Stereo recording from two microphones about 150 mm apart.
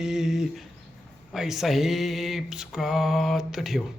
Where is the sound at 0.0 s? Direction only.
5° right (ahead or behind).